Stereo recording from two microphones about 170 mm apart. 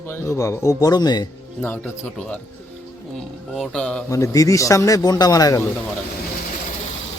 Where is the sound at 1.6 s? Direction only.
10° left (ahead or behind).